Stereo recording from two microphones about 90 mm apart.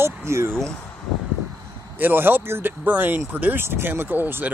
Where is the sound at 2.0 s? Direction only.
25° right (ahead or behind).